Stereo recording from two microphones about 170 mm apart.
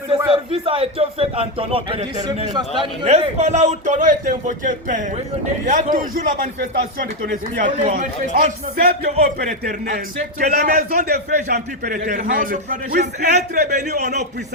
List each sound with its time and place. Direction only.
0.3 s a man's voice: 35° right (ahead or behind)
2.5 s a man's voice: 25° right (ahead or behind)
3.0 s a man's voice: 40° right (ahead or behind); by 7.6 s 65° right (ahead or behind)
7.6 s a man's voice: 45° right (ahead or behind)